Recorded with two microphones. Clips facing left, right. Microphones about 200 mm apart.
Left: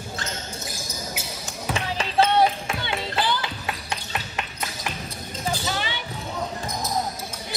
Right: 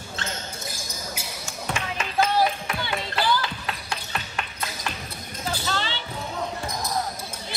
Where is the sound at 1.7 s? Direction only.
30° left (ahead or behind).